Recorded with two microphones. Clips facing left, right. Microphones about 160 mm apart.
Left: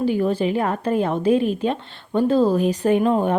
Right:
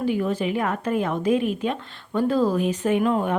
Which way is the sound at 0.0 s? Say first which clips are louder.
Left 4 dB; 30° left (ahead or behind).